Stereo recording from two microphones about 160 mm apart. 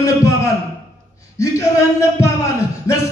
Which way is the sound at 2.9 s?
20° left (ahead or behind).